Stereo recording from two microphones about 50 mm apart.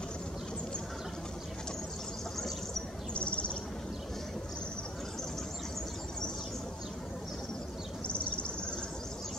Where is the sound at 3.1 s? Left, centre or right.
Left.